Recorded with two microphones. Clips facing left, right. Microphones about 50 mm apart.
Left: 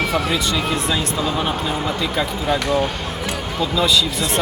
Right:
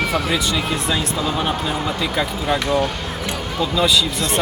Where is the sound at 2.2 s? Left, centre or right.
Centre.